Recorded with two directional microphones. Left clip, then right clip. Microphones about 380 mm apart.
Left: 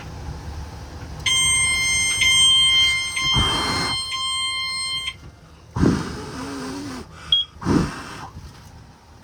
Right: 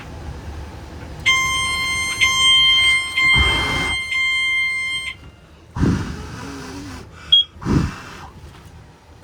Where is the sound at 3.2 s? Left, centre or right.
Centre.